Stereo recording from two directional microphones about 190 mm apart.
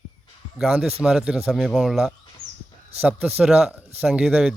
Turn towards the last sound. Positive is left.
turn(degrees=-5)  # may be behind; listen again after turning